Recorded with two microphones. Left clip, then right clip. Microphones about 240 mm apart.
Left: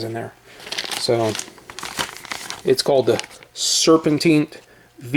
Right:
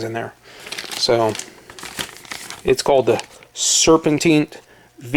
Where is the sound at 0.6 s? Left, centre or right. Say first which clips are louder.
Left 2 dB; centre.